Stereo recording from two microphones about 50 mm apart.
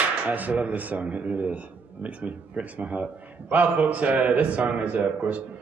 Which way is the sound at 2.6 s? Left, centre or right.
Right.